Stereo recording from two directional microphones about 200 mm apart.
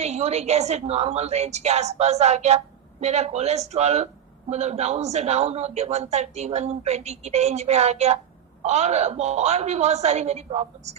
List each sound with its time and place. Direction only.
0.0 s a man's voice: 35° right (ahead or behind)